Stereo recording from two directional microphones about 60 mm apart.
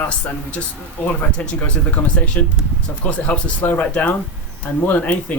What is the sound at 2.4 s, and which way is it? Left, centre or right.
Speech, left.